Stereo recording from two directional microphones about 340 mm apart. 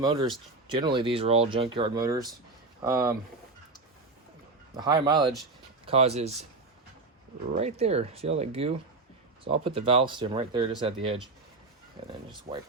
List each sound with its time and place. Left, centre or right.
0.0 s speech: centre
4.8 s speech: centre
7.5 s speech: centre
12.5 s speech: right